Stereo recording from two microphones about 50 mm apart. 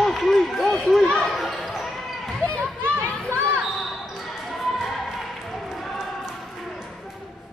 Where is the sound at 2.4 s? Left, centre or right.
Left.